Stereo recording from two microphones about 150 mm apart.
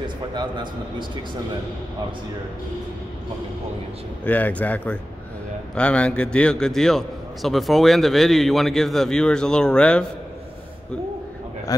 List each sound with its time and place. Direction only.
0.3 s a man's voice: 30° right (ahead or behind)
4.2 s a man's voice: 10° left (ahead or behind)